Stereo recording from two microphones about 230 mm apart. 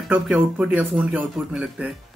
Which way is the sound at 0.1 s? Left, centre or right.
Centre.